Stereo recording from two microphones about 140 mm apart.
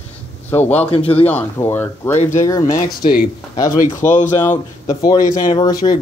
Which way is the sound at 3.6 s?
25° left (ahead or behind).